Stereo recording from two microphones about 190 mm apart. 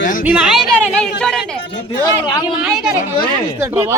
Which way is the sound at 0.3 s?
5° right (ahead or behind).